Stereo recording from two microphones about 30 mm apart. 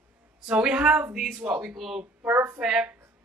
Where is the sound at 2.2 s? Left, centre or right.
Right.